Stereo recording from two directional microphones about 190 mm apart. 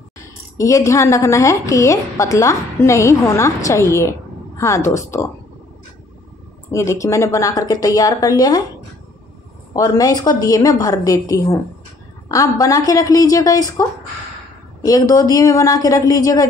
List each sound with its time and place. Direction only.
0.2 s a woman's voice: 15° left (ahead or behind)
6.7 s speech: 15° left (ahead or behind)
9.8 s a woman's voice: 20° left (ahead or behind)
14.9 s speech: 20° left (ahead or behind)